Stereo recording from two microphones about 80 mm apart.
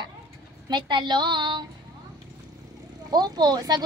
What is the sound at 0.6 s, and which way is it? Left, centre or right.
A woman's voice, right.